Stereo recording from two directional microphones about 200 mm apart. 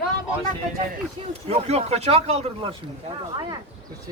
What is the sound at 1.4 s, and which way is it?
Speech, 30° right (ahead or behind).